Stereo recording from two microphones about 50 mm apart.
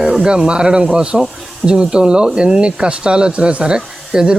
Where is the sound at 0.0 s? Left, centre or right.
Centre.